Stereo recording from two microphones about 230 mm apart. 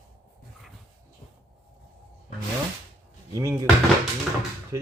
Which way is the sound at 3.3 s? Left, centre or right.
Centre.